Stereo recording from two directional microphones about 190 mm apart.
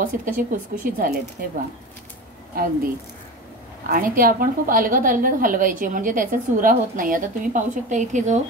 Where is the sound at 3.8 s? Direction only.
50° right (ahead or behind).